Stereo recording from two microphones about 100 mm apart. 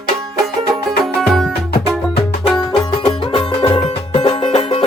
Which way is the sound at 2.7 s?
60° left (ahead or behind).